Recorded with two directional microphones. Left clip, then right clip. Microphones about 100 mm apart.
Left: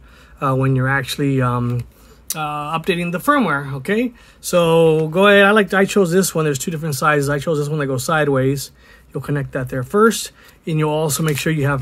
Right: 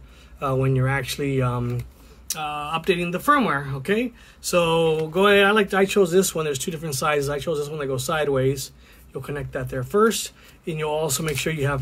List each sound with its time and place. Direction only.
0.4 s speech: 45° left (ahead or behind)
0.7 s speech: 30° left (ahead or behind); by 6.7 s 50° left (ahead or behind)
6.7 s speech: 35° left (ahead or behind)